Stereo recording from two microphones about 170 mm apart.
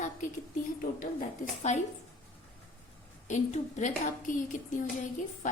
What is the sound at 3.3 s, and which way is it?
A child's voice, 45° left (ahead or behind).